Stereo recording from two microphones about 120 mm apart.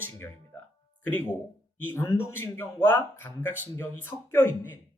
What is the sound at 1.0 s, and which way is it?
A man's voice, 15° left (ahead or behind).